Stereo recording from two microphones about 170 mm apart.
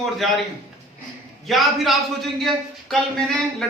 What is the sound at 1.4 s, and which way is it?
A man's voice, centre (ahead or behind).